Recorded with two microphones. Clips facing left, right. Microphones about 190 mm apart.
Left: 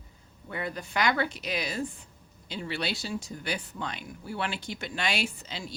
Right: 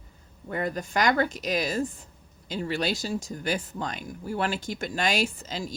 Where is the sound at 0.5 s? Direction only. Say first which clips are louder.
Right 4 dB; 45° right (ahead or behind).